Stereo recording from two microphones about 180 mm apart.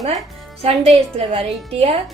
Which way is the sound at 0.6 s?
35° right (ahead or behind).